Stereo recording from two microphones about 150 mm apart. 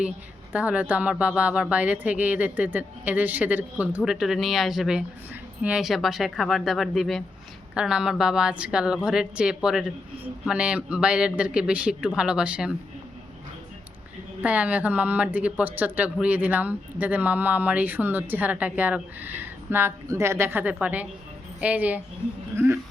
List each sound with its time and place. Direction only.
0.5 s a woman's voice: 10° right (ahead or behind)
14.4 s speech: 10° right (ahead or behind)